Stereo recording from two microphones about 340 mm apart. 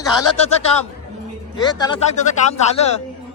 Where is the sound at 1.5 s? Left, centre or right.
Centre.